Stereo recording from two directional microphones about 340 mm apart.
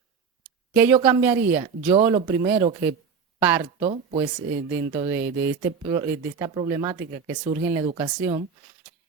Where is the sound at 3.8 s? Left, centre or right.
Centre.